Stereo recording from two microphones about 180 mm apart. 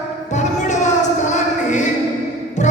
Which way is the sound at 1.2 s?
40° left (ahead or behind).